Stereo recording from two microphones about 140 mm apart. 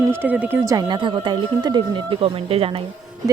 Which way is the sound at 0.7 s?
30° right (ahead or behind).